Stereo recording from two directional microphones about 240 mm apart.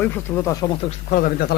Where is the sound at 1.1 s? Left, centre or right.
Left.